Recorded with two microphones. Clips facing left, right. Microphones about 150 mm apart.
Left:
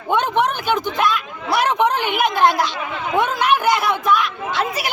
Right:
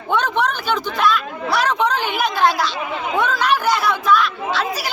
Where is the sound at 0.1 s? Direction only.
20° left (ahead or behind).